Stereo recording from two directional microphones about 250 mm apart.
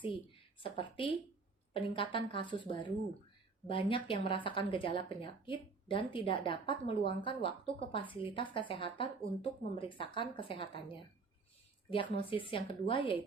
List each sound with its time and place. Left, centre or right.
0.6 s speech: left
3.7 s speech: left